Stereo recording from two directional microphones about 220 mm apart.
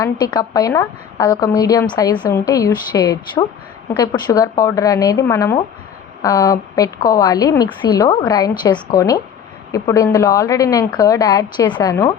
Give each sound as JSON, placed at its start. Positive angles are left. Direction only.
{"t": 0.0, "sound": "a woman's voice", "side_deg": 20}